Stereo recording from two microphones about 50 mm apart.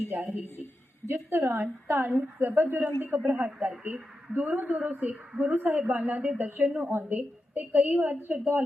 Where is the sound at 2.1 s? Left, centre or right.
Right.